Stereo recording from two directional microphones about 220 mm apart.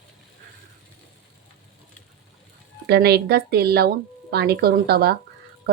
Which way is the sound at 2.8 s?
45° right (ahead or behind).